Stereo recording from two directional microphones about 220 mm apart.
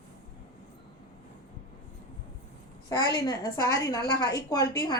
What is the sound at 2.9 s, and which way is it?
A woman's voice, 15° left (ahead or behind).